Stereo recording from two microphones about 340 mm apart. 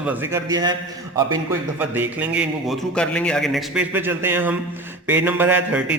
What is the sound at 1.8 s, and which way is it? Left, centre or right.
A man's voice, centre.